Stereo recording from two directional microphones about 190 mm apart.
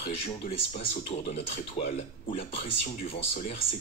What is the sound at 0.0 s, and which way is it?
Speech, 30° left (ahead or behind).